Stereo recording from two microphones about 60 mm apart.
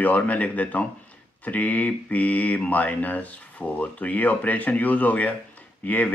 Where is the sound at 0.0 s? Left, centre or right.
Left.